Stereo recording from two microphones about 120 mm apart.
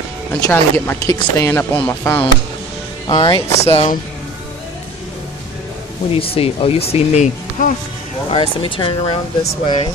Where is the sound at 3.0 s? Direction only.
40° left (ahead or behind).